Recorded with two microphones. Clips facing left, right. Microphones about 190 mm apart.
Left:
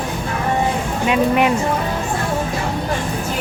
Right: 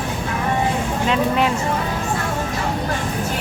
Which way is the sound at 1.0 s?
15° left (ahead or behind).